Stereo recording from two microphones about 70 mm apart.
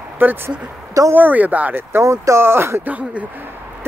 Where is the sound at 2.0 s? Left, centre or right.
Right.